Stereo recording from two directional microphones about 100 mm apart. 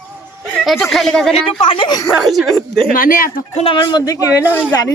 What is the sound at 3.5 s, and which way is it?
Speech, 75° left (ahead or behind).